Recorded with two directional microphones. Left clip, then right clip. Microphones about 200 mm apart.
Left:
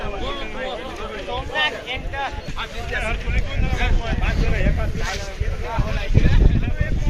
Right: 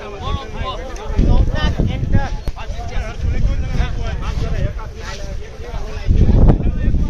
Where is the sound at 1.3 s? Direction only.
55° right (ahead or behind).